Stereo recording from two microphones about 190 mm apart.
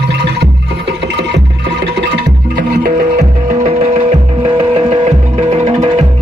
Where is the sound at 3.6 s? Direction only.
35° right (ahead or behind).